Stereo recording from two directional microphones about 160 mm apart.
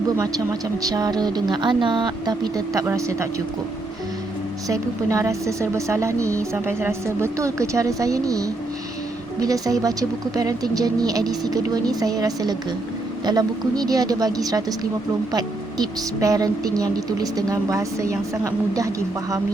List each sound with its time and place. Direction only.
0.2 s speech: 25° right (ahead or behind)
4.7 s speech: 20° right (ahead or behind)